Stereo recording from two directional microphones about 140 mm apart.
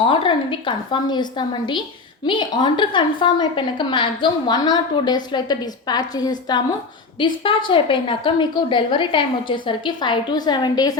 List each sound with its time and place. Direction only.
0.1 s a woman's voice: 35° left (ahead or behind)